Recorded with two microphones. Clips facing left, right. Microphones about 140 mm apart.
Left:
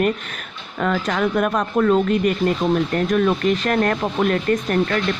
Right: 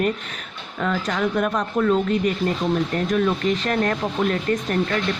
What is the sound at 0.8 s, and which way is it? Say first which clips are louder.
Speech: left 3 dB; 55° left (ahead or behind).